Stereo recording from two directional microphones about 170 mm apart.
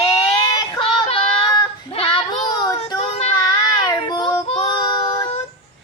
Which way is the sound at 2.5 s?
20° left (ahead or behind).